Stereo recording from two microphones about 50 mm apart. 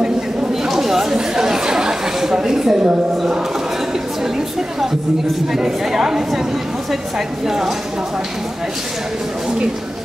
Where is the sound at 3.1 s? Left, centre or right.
Centre.